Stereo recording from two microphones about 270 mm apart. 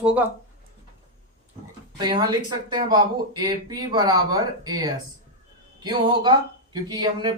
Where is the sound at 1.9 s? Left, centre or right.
Centre.